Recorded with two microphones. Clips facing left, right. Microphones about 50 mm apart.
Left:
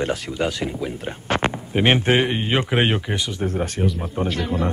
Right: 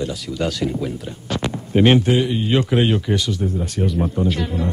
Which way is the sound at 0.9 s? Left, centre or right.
Left.